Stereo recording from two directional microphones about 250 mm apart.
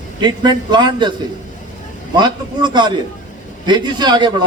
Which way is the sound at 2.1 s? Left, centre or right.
Centre.